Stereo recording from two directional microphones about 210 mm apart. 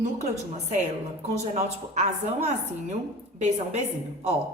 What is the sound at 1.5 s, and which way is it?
A woman's voice, 30° right (ahead or behind).